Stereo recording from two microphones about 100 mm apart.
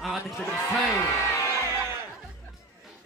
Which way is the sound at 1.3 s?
30° left (ahead or behind).